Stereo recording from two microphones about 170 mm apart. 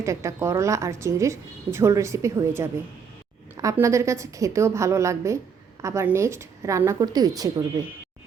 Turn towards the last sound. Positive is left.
turn(degrees=-20)  # may be behind; listen again after turning